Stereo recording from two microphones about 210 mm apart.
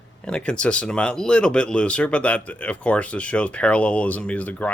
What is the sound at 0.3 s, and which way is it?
Speech, 5° left (ahead or behind).